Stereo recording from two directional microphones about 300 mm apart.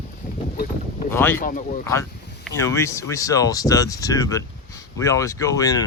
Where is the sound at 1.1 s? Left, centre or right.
Centre.